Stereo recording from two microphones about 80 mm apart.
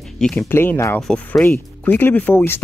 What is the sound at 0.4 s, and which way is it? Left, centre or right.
Speech, left.